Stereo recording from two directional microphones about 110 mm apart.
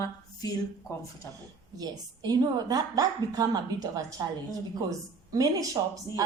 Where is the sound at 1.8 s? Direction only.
35° right (ahead or behind).